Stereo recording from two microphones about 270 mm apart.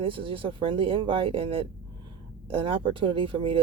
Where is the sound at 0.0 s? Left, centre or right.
Centre.